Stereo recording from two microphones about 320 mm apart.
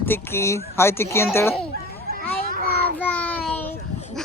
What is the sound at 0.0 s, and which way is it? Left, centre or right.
Speech, centre.